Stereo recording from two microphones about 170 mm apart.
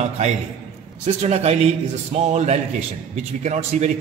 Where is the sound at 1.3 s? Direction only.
40° right (ahead or behind).